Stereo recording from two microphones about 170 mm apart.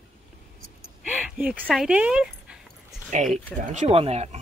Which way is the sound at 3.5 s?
40° right (ahead or behind).